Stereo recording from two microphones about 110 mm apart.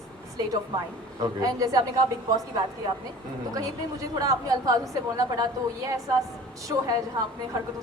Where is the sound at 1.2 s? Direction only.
35° right (ahead or behind).